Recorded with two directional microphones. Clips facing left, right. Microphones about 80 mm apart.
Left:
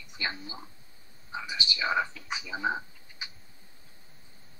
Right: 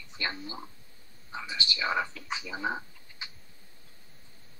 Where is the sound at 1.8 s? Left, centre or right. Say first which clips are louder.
Left 2 dB; centre.